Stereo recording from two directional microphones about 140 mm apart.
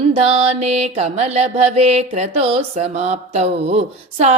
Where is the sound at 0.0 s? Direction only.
45° right (ahead or behind).